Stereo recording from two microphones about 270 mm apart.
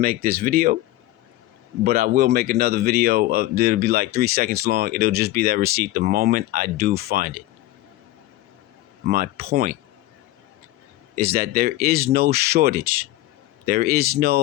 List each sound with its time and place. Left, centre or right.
0.0 s a man's voice: right
1.8 s a man's voice: right
9.0 s a man's voice: right
11.1 s a man's voice: right